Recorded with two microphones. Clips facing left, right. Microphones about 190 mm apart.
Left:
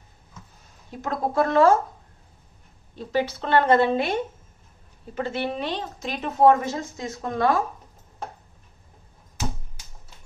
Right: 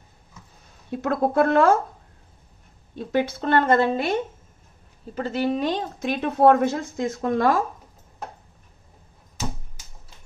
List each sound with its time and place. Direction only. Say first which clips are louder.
1.0 s speech: right 3 dB; 60° right (ahead or behind)
3.0 s a woman's voice: right 2 dB; 55° right (ahead or behind)
5.1 s a woman's voice: right 3 dB; 40° right (ahead or behind)